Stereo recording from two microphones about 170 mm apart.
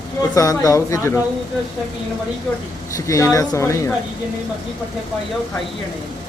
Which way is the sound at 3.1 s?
20° left (ahead or behind).